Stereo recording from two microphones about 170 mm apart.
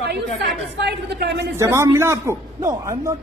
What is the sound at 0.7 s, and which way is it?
Speech, 80° right.